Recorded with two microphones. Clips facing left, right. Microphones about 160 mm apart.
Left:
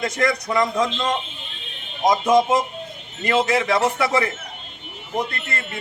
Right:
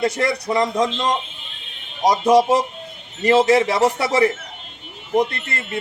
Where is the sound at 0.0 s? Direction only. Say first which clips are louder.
Right 2 dB; 30° right (ahead or behind).